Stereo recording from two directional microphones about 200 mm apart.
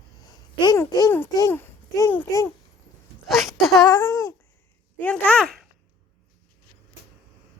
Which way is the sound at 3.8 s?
15° left (ahead or behind).